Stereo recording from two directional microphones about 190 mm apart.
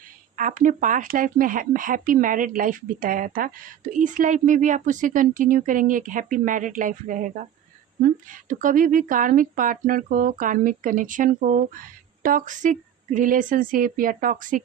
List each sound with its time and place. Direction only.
0.3 s speech: 45° right (ahead or behind)